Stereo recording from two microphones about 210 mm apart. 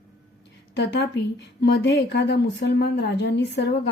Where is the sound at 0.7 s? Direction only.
50° left (ahead or behind).